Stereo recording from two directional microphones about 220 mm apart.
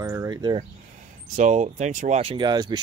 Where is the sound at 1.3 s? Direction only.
30° right (ahead or behind).